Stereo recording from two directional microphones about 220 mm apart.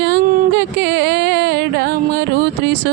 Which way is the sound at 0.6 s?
50° right (ahead or behind).